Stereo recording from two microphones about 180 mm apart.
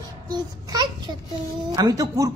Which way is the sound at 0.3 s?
25° right (ahead or behind).